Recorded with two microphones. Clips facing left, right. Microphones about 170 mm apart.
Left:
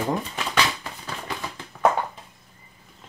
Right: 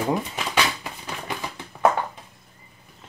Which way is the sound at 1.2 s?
15° right (ahead or behind).